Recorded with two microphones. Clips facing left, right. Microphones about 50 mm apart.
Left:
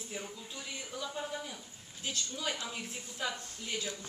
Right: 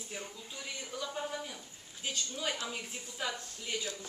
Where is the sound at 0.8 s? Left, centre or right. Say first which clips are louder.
Right 1 dB; centre.